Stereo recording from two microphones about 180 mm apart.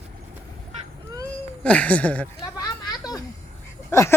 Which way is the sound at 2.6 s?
20° left (ahead or behind).